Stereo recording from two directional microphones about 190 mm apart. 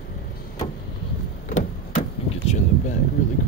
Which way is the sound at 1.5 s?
40° left (ahead or behind).